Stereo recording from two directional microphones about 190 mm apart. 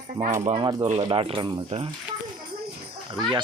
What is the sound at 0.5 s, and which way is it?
Speech, 25° right (ahead or behind).